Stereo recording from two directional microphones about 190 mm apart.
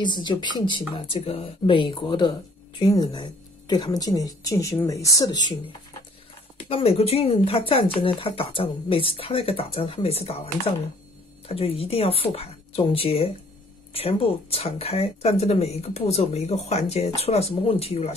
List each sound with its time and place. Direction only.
0.0 s a woman's voice: 25° left (ahead or behind)
6.7 s speech: 30° left (ahead or behind)